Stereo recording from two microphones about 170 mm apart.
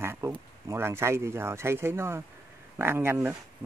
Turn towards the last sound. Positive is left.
turn(degrees=-15)  # may be behind; listen again after turning